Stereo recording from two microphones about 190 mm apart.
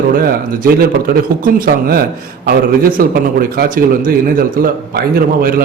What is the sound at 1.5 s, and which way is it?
A man's voice, 50° right (ahead or behind).